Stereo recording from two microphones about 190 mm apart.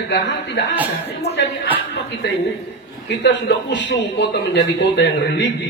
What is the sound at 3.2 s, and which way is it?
A man's voice, 65° left (ahead or behind).